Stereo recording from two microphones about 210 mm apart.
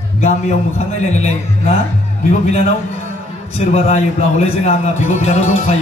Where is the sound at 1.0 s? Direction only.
30° left (ahead or behind).